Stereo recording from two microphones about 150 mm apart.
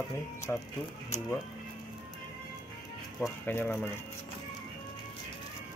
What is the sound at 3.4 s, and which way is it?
Speech, 15° left (ahead or behind).